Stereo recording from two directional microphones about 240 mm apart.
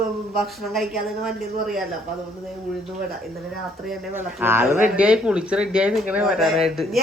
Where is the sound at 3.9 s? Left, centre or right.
Centre.